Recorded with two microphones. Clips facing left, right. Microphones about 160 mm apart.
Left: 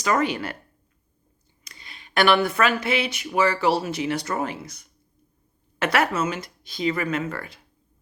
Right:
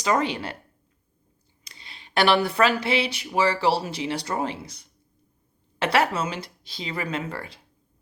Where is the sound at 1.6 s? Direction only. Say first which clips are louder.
Left 1 dB; 30° right (ahead or behind).